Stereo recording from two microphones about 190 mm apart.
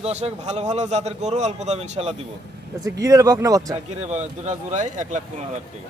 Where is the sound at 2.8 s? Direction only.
20° right (ahead or behind).